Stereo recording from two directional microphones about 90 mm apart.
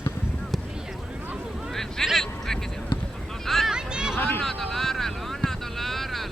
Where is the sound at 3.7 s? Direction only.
10° right (ahead or behind).